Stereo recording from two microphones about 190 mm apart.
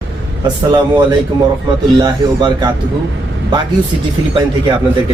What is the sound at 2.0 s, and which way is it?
Speech, 20° right (ahead or behind).